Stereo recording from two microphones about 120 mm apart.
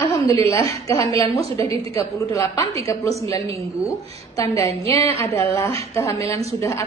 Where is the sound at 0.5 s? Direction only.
25° left (ahead or behind).